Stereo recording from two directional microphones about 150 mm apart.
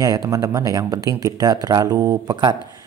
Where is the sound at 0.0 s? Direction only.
25° right (ahead or behind).